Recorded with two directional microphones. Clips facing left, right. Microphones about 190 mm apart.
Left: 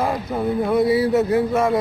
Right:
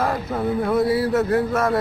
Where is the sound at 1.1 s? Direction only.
20° left (ahead or behind).